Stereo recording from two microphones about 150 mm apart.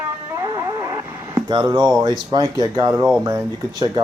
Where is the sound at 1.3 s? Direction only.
25° right (ahead or behind).